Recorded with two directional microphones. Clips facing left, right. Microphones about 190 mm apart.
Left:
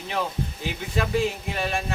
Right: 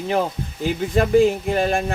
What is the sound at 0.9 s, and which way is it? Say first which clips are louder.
Speech: right 9 dB; 45° right (ahead or behind).